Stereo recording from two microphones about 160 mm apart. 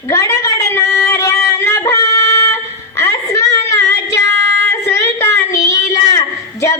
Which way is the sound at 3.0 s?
20° left (ahead or behind).